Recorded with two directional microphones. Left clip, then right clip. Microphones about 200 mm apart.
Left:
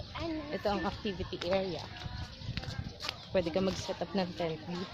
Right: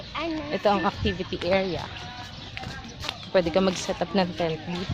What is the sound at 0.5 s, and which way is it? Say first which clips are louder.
Speech: right 12 dB; 25° right (ahead or behind).